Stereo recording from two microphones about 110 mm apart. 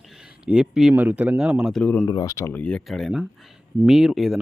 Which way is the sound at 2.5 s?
10° left (ahead or behind).